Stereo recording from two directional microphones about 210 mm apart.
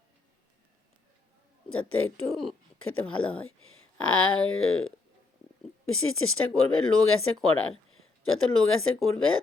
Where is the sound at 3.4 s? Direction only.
80° left.